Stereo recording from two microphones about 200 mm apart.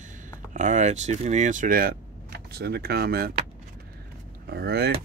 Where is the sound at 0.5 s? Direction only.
35° right (ahead or behind).